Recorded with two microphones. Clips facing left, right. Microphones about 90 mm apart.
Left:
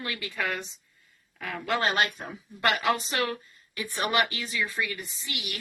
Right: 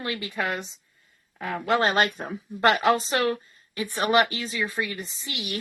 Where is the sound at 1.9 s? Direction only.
40° right (ahead or behind).